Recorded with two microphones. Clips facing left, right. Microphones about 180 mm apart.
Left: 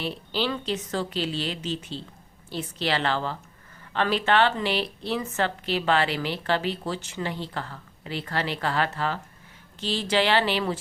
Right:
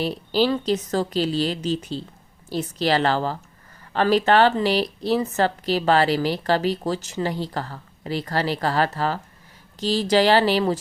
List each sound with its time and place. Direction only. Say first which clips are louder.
0.0 s speech: right 7 dB; 40° right (ahead or behind)